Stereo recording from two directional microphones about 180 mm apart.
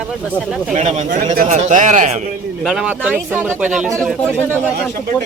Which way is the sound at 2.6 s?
5° right (ahead or behind).